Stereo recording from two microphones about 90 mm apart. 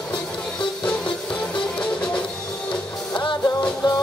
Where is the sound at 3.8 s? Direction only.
60° left (ahead or behind).